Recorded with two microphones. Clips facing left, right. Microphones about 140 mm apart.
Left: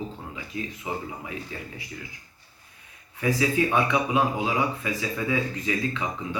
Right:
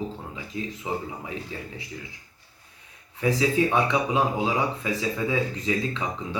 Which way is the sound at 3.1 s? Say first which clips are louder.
Right 1 dB; 25° right (ahead or behind).